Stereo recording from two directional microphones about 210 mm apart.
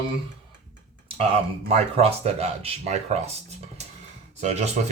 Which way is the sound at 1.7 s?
30° right (ahead or behind).